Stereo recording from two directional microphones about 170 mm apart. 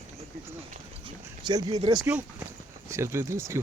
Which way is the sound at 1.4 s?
25° right (ahead or behind).